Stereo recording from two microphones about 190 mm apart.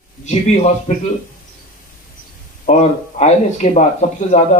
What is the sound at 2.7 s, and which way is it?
Speech, 35° left (ahead or behind).